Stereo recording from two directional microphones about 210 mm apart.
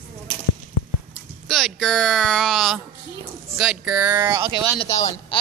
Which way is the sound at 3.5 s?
5° right (ahead or behind).